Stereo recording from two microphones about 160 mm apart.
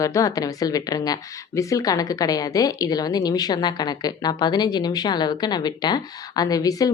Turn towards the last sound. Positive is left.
turn(degrees=25)  # may be behind; listen again after turning